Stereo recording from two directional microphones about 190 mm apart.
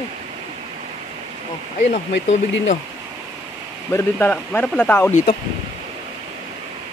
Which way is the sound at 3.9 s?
15° left (ahead or behind).